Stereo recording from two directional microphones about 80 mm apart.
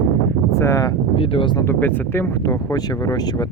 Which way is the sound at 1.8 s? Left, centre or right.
Left.